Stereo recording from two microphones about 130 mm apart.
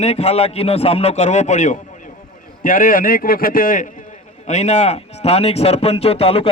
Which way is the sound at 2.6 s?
90° left.